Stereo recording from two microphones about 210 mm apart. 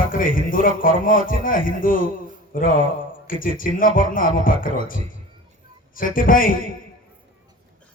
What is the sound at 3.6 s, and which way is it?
A man's voice, 40° left (ahead or behind).